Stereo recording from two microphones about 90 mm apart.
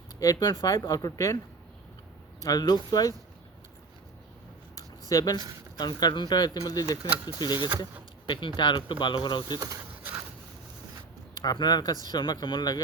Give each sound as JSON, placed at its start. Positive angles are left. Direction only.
{"t": 0.2, "sound": "speech", "side_deg": 35}
{"t": 2.4, "sound": "speech", "side_deg": 45}
{"t": 5.0, "sound": "speech", "side_deg": 45}
{"t": 8.3, "sound": "speech", "side_deg": 65}
{"t": 9.6, "sound": "speech", "side_deg": -40}
{"t": 11.4, "sound": "speech", "side_deg": 50}